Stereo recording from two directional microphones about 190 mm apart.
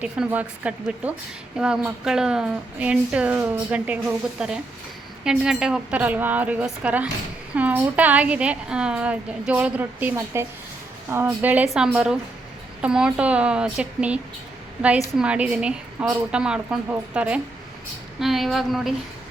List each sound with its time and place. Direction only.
0.0 s a woman's voice: 5° right (ahead or behind)
15.2 s a woman's voice: 5° right (ahead or behind)